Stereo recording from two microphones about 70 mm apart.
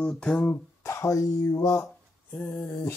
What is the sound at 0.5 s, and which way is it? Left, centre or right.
Music, left.